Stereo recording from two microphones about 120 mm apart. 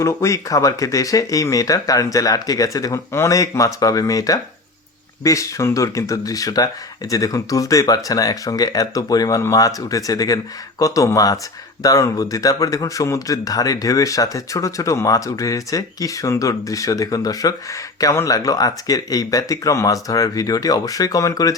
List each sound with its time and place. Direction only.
0.0 s speech: 25° left (ahead or behind)